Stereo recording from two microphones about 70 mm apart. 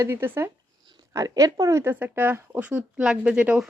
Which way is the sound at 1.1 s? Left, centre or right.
Right.